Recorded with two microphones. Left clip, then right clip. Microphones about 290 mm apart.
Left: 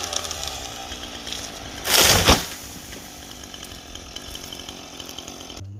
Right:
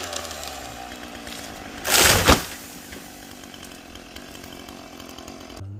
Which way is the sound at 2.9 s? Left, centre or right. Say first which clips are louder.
Left 1 dB; centre.